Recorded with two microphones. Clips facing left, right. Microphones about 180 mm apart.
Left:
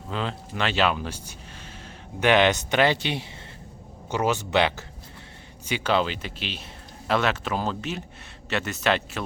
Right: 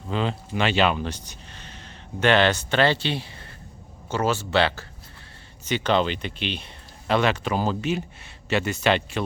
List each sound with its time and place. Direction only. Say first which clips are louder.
0.1 s speech: right 4 dB; centre (ahead or behind)